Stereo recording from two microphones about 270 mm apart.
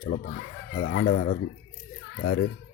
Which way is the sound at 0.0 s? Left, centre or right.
Left.